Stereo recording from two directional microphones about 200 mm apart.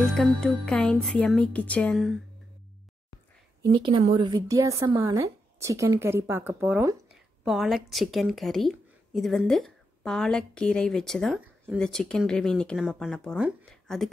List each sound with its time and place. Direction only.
0.1 s speech: centre (ahead or behind)
3.8 s a woman's voice: 25° right (ahead or behind)
7.4 s speech: centre (ahead or behind)